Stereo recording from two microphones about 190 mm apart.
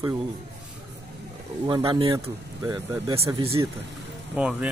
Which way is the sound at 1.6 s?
25° right (ahead or behind).